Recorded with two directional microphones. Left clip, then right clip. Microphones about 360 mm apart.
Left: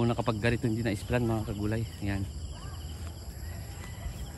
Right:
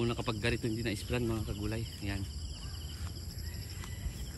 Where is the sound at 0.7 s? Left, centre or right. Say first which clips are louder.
Left 4 dB; left.